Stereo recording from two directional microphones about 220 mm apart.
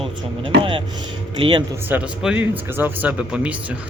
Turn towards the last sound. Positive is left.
turn(degrees=-5)  # may be behind; listen again after turning